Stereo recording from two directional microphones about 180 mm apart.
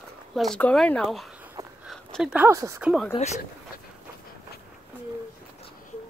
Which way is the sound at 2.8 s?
Centre (ahead or behind).